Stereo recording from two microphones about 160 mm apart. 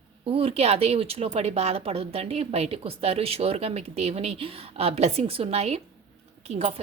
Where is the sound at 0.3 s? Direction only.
35° right (ahead or behind).